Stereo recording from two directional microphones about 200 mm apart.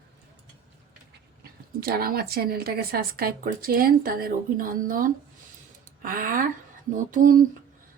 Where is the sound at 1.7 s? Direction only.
50° right (ahead or behind).